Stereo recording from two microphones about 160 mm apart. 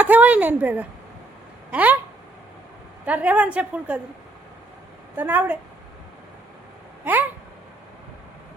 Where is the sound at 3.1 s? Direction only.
10° right (ahead or behind).